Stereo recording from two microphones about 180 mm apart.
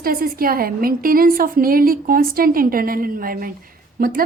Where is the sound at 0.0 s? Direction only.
55° right (ahead or behind).